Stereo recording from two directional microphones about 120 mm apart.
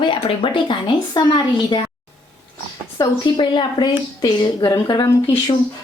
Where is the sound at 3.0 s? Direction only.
40° left (ahead or behind).